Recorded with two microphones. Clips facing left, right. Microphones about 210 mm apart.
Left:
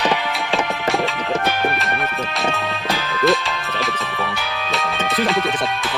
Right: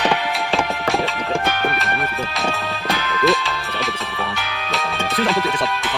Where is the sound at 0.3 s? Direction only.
Centre (ahead or behind).